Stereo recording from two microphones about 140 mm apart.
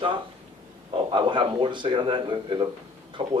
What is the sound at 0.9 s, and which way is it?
Speech, 35° right (ahead or behind).